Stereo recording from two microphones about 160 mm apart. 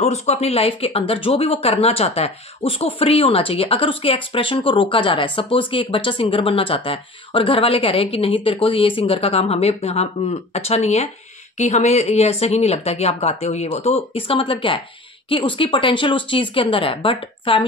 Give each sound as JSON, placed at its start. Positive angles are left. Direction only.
{"t": 0.0, "sound": "speech", "side_deg": 40}